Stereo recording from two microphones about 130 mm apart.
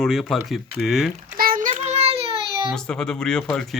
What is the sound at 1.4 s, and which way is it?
Child singing, 90° right.